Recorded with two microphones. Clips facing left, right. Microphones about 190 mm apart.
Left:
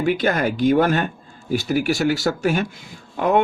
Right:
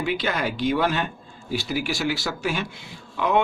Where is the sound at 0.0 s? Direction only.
50° left (ahead or behind).